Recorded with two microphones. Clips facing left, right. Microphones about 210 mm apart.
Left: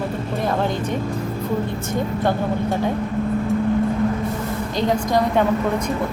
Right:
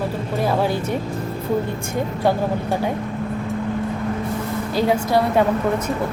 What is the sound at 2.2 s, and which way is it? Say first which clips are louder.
Speech: right 3 dB; 10° right (ahead or behind).